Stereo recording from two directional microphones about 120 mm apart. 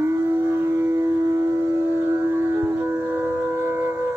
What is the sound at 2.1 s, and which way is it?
Music, 20° right (ahead or behind).